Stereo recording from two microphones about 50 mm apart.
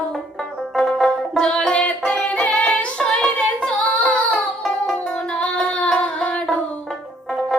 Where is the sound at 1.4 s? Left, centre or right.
Centre.